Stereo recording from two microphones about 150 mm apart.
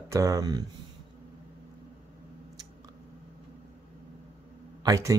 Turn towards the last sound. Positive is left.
turn(degrees=-20)  # may be behind; listen again after turning